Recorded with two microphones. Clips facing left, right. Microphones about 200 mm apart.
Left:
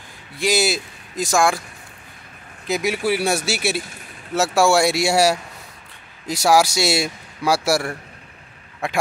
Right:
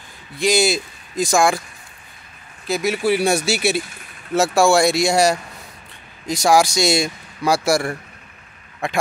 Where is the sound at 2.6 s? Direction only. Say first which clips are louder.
Right 2 dB; 15° left (ahead or behind).